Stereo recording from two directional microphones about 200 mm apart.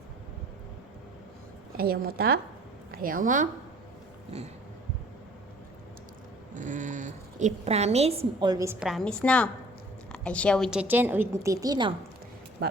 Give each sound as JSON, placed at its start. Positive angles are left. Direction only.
{"t": 1.7, "sound": "a woman's voice", "side_deg": -50}
{"t": 6.5, "sound": "a woman's voice", "side_deg": -40}